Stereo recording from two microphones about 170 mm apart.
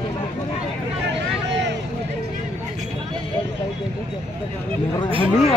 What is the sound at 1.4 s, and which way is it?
Vehicle, 90° right.